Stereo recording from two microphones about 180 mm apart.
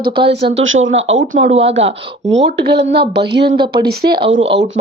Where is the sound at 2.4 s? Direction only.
70° right (ahead or behind).